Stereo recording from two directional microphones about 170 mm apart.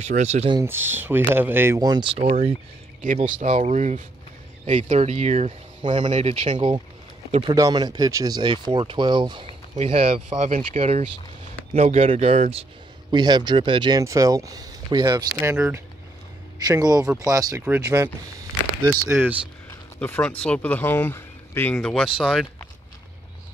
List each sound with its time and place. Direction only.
0.0 s speech: 40° right (ahead or behind)
0.7 s speech: 10° right (ahead or behind)
2.1 s speech: 40° right (ahead or behind)
5.8 s speech: 30° right (ahead or behind)
6.1 s speech: 45° right (ahead or behind)
6.5 s speech: 25° right (ahead or behind)
13.1 s speech: 25° right (ahead or behind)
15.4 s speech: 15° right (ahead or behind)
20.0 s speech: 10° left (ahead or behind)